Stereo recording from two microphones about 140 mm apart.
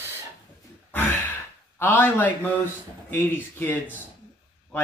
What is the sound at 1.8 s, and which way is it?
Speech, 15° left (ahead or behind).